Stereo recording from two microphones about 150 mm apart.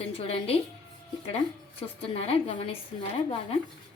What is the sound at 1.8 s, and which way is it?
Speech, 40° left (ahead or behind).